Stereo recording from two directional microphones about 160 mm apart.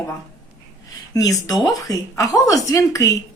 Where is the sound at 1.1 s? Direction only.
20° left (ahead or behind).